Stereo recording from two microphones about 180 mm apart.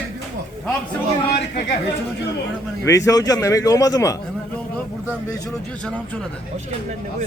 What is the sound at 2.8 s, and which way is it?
A man's voice, 20° left (ahead or behind).